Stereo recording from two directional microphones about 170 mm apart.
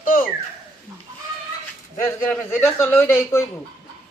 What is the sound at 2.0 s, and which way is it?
A man's voice, 10° left (ahead or behind).